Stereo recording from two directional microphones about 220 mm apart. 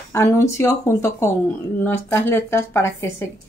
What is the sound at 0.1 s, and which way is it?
Speech, 15° left (ahead or behind).